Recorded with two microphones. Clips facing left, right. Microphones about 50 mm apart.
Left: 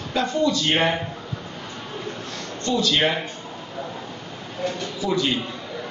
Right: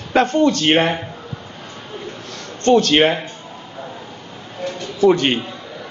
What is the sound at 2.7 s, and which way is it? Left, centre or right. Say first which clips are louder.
Speech: right 8 dB; right.